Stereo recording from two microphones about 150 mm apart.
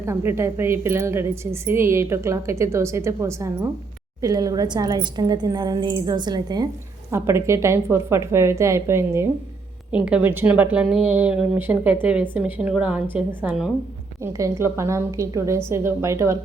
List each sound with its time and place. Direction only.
0.0 s a woman's voice: 15° right (ahead or behind)
14.2 s a woman's voice: 20° right (ahead or behind)